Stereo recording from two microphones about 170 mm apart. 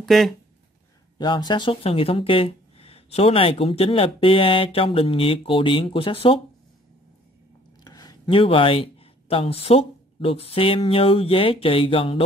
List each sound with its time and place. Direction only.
0.0 s speech: centre (ahead or behind)
1.1 s speech: 25° left (ahead or behind)
7.8 s speech: 20° left (ahead or behind)